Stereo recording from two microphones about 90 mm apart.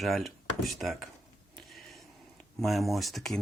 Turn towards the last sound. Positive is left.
turn(degrees=5)  # may be behind; listen again after turning